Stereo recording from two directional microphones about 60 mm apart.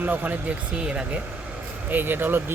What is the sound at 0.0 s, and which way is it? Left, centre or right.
A woman's voice, right.